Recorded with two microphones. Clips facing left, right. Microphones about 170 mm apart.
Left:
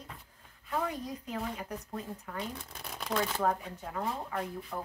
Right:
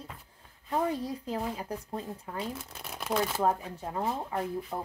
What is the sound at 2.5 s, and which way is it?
Speech, 5° right (ahead or behind).